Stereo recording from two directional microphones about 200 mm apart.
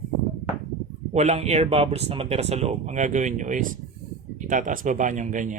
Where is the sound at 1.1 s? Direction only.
35° right (ahead or behind).